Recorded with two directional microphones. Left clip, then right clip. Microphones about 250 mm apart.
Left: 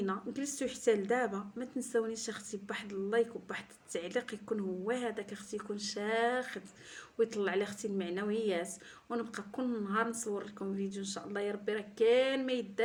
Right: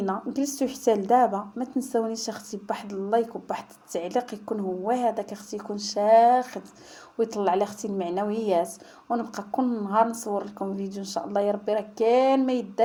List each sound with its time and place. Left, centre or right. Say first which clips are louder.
0.1 s speech: right 10 dB; centre